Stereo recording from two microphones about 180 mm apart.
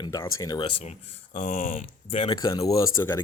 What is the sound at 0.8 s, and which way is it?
Speech, 40° left (ahead or behind).